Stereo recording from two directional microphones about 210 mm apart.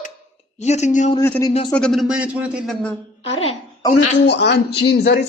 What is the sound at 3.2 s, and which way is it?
Speech, 30° left (ahead or behind).